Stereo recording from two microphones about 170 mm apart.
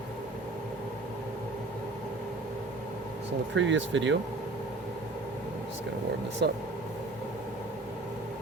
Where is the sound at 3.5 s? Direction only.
90° right.